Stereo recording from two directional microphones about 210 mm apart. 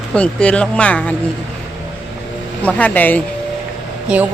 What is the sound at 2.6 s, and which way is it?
Speech, 5° left (ahead or behind).